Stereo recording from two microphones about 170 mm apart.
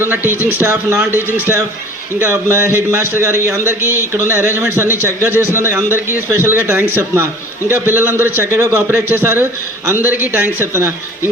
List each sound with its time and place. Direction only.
0.0 s a man's voice: 10° right (ahead or behind)